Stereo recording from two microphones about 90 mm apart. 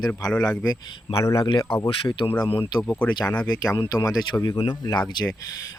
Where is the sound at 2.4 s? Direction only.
90° left.